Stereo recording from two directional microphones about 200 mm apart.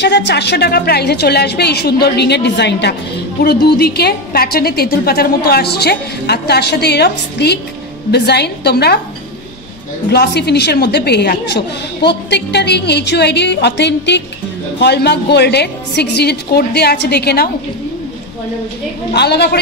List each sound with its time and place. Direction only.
0.0 s a woman's voice: 60° left (ahead or behind)
10.1 s a woman's voice: 55° left (ahead or behind)
19.1 s a woman's voice: 55° left (ahead or behind)